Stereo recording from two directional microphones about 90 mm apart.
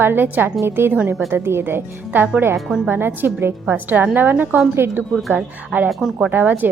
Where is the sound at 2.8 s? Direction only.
20° right (ahead or behind).